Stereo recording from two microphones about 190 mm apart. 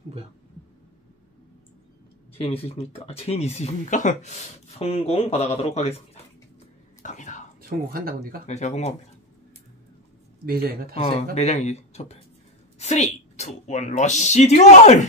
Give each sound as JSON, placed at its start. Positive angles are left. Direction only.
{"t": 2.3, "sound": "speech", "side_deg": 30}
{"t": 7.0, "sound": "whispering", "side_deg": 40}
{"t": 7.9, "sound": "speech", "side_deg": -50}
{"t": 8.5, "sound": "speech", "side_deg": 35}
{"t": 10.4, "sound": "speech", "side_deg": -50}
{"t": 11.3, "sound": "speech", "side_deg": 35}